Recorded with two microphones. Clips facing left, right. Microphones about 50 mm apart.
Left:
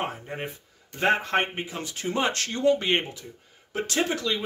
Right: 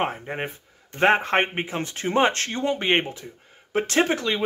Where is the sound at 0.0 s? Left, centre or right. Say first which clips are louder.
Right 5 dB; right.